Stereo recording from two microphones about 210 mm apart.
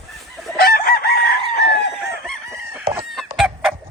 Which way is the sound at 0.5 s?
45° left (ahead or behind).